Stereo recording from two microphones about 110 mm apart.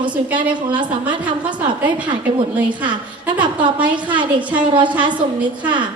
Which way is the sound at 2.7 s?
45° right (ahead or behind).